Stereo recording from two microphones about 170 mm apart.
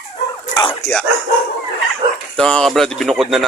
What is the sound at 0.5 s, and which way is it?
Dog, 25° left (ahead or behind).